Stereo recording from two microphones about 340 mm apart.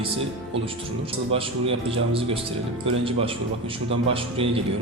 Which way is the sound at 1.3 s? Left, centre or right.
Centre.